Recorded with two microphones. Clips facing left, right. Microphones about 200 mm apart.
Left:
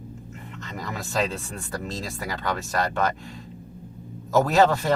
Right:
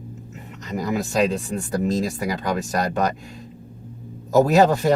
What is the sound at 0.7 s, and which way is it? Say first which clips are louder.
Speech: right 7 dB; 15° right (ahead or behind).